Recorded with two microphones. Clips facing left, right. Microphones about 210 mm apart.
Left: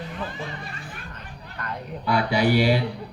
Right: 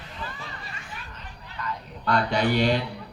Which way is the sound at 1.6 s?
55° left (ahead or behind).